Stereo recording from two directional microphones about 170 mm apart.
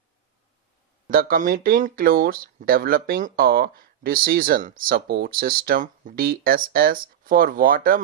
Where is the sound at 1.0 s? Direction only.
55° right (ahead or behind).